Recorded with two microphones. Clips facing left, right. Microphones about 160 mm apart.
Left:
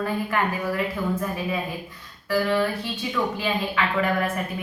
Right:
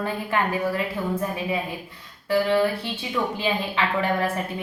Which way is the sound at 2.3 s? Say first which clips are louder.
Right 2 dB; 25° right (ahead or behind).